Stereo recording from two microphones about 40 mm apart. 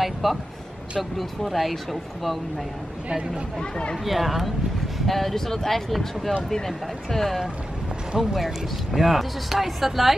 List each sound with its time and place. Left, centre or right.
0.0 s speech: centre
1.4 s speech: centre
4.0 s speech: centre